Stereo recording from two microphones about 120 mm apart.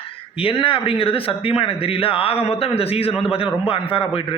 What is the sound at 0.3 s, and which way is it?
A man's voice, 50° left (ahead or behind).